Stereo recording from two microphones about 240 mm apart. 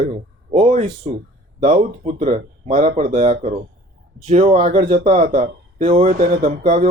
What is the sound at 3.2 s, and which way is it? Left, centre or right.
Speech, right.